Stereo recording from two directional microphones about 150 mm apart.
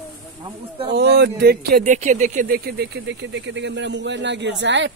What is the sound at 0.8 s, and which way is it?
Speech, 90° right.